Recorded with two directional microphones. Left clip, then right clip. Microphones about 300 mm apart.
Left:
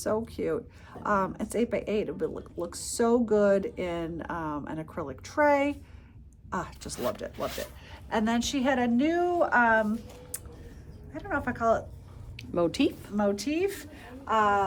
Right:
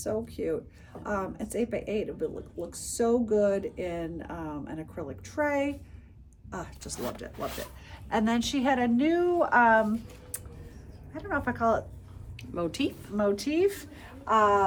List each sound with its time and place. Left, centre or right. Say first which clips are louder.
0.0 s a woman's voice: left 2 dB; centre
11.1 s a woman's voice: even; centre
12.4 s a woman's voice: left 5 dB; left
13.1 s speech: right 3 dB; centre